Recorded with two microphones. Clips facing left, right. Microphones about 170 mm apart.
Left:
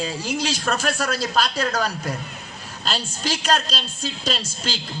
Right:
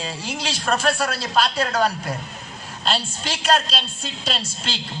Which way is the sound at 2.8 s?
40° left (ahead or behind).